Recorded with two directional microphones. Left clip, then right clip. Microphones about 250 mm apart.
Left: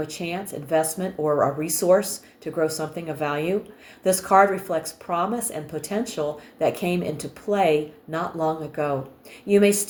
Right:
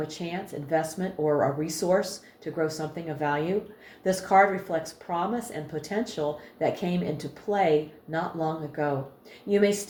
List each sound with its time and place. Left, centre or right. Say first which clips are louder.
0.2 s speech: left 4 dB; left